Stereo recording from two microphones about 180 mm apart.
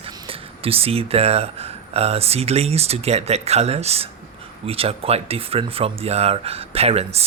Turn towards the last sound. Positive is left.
turn(degrees=-35)  # may be behind; listen again after turning